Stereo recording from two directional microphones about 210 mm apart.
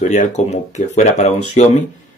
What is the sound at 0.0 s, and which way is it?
Speech, 35° left (ahead or behind).